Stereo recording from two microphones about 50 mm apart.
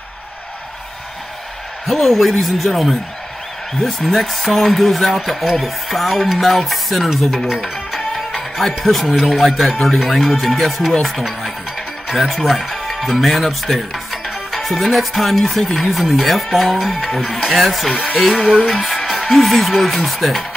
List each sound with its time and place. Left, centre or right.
1.9 s speech: centre
17.9 s music: left
18.8 s music: centre
19.3 s speech: centre